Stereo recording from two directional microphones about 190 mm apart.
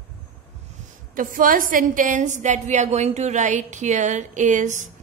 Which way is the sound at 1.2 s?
45° right (ahead or behind).